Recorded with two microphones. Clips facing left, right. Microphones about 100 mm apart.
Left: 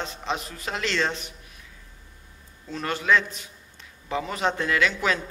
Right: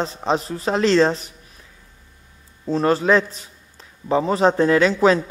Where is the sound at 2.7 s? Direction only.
35° right (ahead or behind).